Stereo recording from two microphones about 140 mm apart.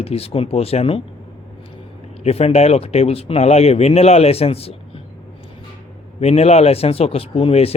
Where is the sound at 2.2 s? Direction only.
45° left (ahead or behind).